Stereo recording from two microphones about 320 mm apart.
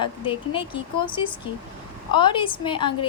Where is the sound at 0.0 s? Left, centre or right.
Centre.